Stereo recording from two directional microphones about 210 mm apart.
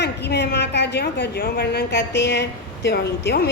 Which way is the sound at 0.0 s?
55° left (ahead or behind).